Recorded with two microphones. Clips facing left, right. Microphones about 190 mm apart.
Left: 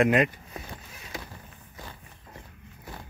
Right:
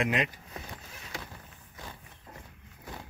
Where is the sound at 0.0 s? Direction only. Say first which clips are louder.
Left 8 dB; 50° left (ahead or behind).